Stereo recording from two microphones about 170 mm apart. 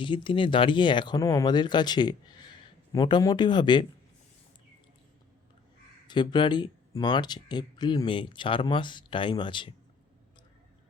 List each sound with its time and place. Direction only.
0.0 s speech: 30° left (ahead or behind)
6.1 s speech: 25° left (ahead or behind)